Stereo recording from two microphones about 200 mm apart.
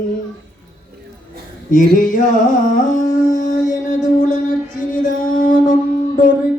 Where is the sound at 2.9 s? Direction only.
40° left (ahead or behind).